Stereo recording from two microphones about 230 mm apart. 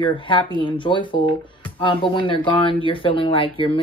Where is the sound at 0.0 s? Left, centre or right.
Left.